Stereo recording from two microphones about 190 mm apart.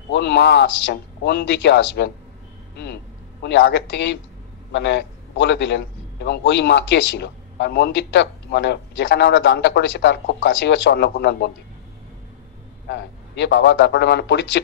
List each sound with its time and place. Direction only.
0.1 s a man's voice: 65° left (ahead or behind)
2.7 s vehicle: 65° left (ahead or behind)
3.4 s a man's voice: 65° left (ahead or behind)
12.8 s a man's voice: 65° left (ahead or behind)